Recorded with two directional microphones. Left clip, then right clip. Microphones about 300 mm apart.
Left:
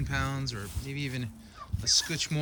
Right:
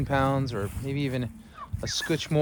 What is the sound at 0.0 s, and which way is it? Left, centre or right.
Speech, centre.